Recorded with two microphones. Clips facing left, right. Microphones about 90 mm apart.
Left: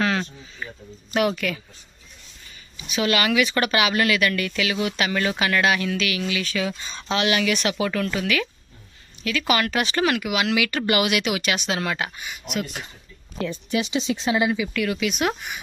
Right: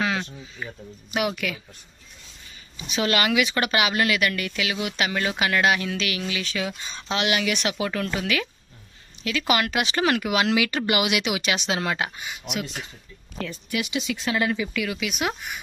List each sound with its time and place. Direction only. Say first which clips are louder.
1.1 s a woman's voice: left 4 dB; 10° right (ahead or behind)
2.8 s speech: left 1 dB; 30° right (ahead or behind)
10.1 s speech: right 1 dB; 35° right (ahead or behind)
10.8 s speech: left 2 dB; 20° right (ahead or behind)
13.4 s speech: left 4 dB; 25° left (ahead or behind)
14.7 s speech: left 4 dB; 5° right (ahead or behind)